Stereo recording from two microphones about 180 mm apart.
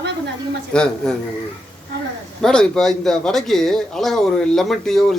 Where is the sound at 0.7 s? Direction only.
5° left (ahead or behind).